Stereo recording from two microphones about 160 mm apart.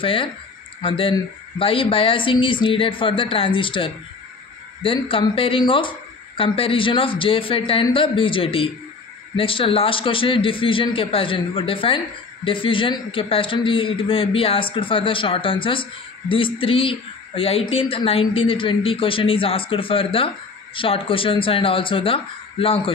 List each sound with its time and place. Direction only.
0.0 s a man's voice: 35° left (ahead or behind)